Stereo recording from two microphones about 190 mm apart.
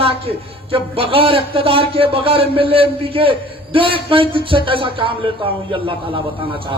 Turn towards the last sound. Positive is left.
turn(degrees=-25)  # may be behind; listen again after turning